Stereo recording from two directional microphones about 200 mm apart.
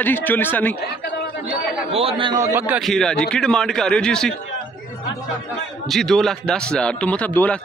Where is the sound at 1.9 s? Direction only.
30° right (ahead or behind); by 2.8 s 15° right (ahead or behind).